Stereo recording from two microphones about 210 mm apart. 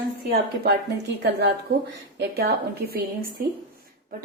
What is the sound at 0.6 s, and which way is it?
A woman's voice, 50° right (ahead or behind).